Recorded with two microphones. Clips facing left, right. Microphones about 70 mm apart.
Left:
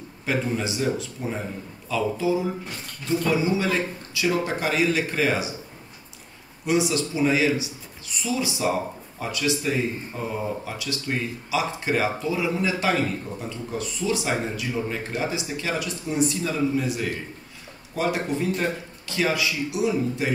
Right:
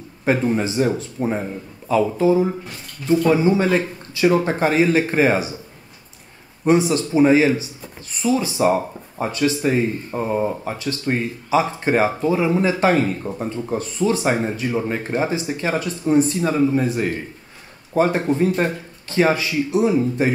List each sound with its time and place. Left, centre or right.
0.2 s speech: right
6.6 s speech: right